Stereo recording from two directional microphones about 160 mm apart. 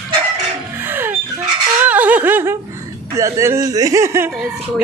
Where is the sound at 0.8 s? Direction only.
15° right (ahead or behind).